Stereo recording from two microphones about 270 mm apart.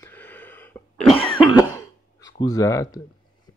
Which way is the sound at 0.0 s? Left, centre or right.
Centre.